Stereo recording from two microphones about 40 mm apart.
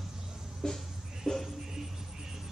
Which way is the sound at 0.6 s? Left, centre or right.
Centre.